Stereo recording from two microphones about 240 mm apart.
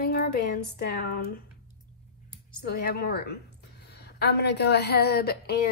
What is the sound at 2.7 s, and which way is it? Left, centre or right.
A woman's voice, left.